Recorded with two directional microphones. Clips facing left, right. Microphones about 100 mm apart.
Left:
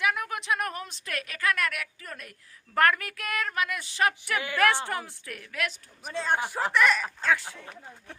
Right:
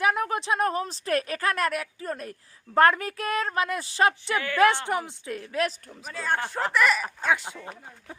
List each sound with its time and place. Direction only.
0.0 s speech: 35° right (ahead or behind)
4.5 s a woman's voice: 20° right (ahead or behind)
6.1 s speech: 20° left (ahead or behind)
6.6 s speech: centre (ahead or behind)
7.2 s a woman's voice: 20° right (ahead or behind)